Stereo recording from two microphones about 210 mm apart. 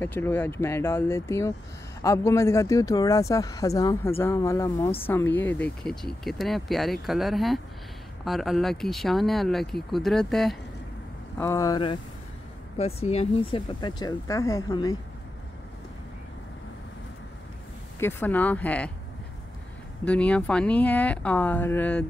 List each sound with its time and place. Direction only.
0.0 s speech: 10° left (ahead or behind)
11.3 s speech: 15° left (ahead or behind)
17.9 s speech: 10° left (ahead or behind)
20.1 s speech: 5° left (ahead or behind)